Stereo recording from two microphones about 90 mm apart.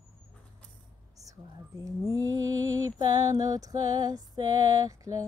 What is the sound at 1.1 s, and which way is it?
Speech, 40° right (ahead or behind).